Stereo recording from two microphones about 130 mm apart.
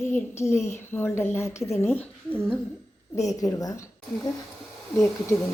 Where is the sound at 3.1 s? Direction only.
25° left (ahead or behind).